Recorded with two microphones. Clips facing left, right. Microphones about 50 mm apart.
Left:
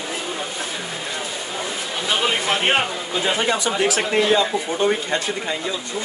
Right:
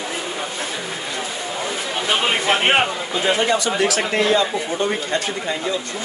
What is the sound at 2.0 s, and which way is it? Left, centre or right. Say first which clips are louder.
Speech: right 2 dB; right.